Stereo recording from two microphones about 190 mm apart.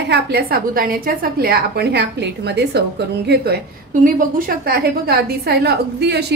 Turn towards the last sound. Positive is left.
turn(degrees=-60)  # may be behind; listen again after turning